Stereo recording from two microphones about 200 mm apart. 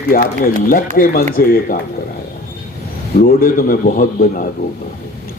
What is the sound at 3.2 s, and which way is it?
Speech, 50° left (ahead or behind).